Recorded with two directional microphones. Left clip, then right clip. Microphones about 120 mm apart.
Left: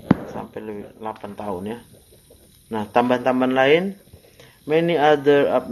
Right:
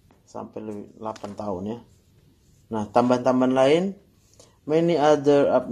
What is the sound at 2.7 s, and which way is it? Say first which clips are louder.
A man's voice: left 2 dB; 40° right (ahead or behind).